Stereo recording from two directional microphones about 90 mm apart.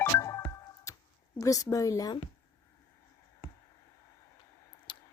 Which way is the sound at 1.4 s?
40° left (ahead or behind).